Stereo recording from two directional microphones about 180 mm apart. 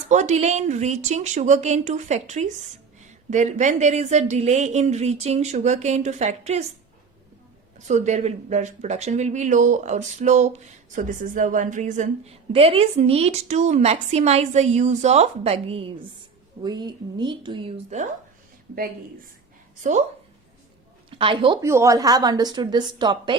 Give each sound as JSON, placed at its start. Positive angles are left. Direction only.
{"t": 0.1, "sound": "speech", "side_deg": -40}
{"t": 7.8, "sound": "a woman's voice", "side_deg": -40}
{"t": 19.9, "sound": "speech", "side_deg": -40}
{"t": 21.2, "sound": "a woman's voice", "side_deg": -30}
{"t": 21.6, "sound": "a woman's voice", "side_deg": -15}